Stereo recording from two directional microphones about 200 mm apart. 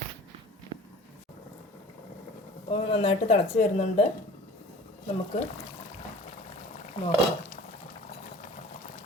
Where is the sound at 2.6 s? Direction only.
30° left (ahead or behind).